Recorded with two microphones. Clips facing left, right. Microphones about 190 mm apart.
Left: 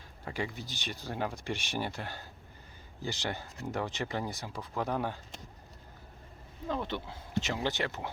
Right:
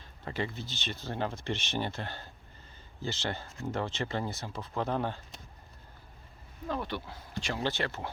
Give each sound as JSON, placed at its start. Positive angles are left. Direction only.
{"t": 0.3, "sound": "speech", "side_deg": 10}
{"t": 6.7, "sound": "speech", "side_deg": 20}